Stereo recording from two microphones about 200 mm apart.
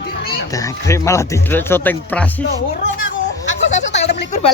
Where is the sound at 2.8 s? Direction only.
70° left (ahead or behind).